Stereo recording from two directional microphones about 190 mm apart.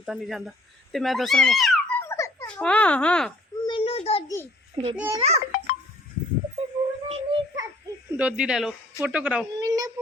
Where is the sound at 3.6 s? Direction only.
30° left (ahead or behind).